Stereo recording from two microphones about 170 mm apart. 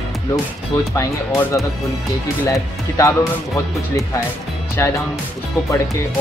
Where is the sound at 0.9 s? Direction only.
15° left (ahead or behind).